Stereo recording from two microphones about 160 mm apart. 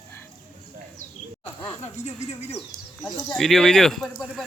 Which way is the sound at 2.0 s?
45° left (ahead or behind).